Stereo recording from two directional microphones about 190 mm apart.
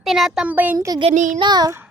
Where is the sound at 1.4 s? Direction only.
20° right (ahead or behind).